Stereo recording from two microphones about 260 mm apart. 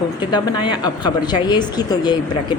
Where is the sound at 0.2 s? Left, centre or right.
Centre.